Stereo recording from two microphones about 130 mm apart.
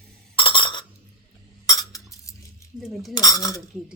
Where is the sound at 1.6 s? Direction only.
25° left (ahead or behind).